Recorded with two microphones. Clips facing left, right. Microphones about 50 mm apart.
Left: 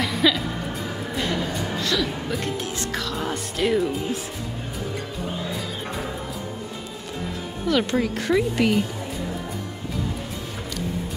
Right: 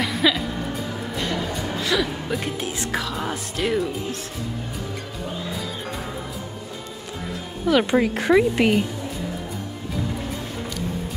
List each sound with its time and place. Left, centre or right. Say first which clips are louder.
0.0 s music: even; centre
7.6 s speech: right 3 dB; centre